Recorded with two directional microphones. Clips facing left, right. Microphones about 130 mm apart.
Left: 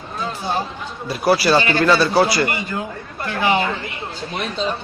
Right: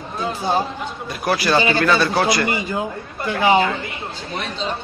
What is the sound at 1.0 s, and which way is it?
Speech, 5° left (ahead or behind).